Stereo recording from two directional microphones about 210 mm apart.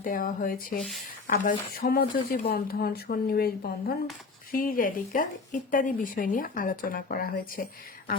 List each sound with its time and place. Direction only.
0.0 s speech: 45° left (ahead or behind)